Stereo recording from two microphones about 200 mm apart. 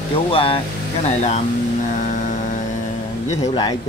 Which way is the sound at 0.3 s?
25° left (ahead or behind).